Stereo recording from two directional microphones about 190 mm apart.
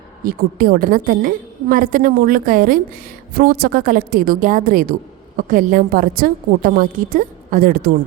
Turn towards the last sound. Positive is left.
turn(degrees=-50)  # may be behind; listen again after turning